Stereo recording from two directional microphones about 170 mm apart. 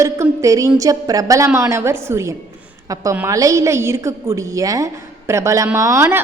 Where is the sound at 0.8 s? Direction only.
20° right (ahead or behind).